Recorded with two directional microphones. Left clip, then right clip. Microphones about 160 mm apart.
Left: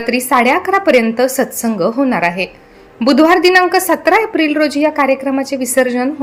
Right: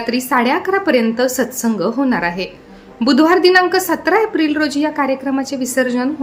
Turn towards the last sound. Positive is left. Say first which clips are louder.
# left 3 dB
turn(degrees=20)  # may be behind; listen again after turning